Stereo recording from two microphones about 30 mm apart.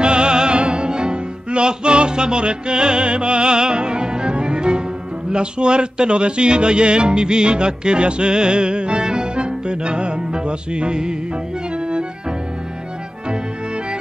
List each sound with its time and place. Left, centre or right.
0.0 s music: right
5.3 s speech: right
11.7 s music: right